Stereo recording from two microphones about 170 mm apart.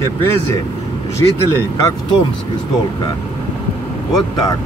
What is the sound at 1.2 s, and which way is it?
Speech, 20° left (ahead or behind).